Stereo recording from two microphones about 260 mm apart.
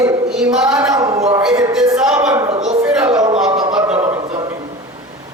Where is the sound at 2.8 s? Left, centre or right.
Centre.